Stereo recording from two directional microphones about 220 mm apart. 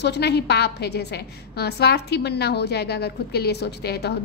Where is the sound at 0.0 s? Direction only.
50° left (ahead or behind).